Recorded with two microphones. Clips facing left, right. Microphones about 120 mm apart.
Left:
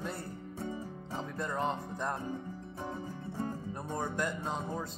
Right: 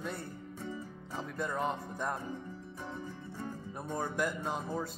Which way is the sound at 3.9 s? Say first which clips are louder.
Right 1 dB; 5° right (ahead or behind).